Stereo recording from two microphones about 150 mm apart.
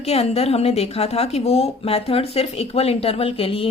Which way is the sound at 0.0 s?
40° left (ahead or behind).